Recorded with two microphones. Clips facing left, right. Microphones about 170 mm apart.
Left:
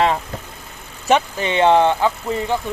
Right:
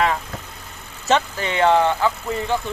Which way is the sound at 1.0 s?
15° left (ahead or behind).